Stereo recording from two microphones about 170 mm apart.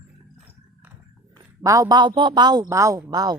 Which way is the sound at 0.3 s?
10° right (ahead or behind).